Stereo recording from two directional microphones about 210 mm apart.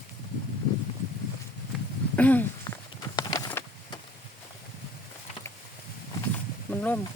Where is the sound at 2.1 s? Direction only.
10° left (ahead or behind).